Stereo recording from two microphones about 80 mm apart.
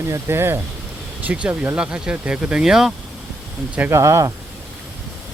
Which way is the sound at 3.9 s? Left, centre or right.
Right.